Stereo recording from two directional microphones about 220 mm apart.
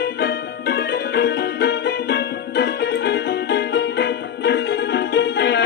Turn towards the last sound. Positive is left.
turn(degrees=50)  # may be behind; listen again after turning